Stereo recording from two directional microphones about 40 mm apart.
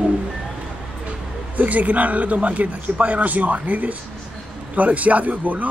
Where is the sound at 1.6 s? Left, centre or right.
Right.